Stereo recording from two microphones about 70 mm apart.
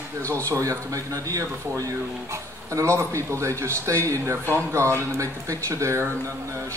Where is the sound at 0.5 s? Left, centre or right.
Right.